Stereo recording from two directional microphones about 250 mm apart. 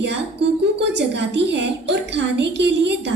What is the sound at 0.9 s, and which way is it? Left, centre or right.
A child's voice, right.